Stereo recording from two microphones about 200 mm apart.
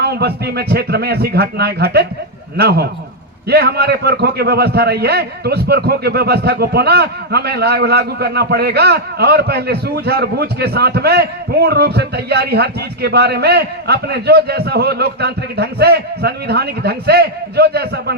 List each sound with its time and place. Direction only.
0.0 s a man's voice: 55° right (ahead or behind)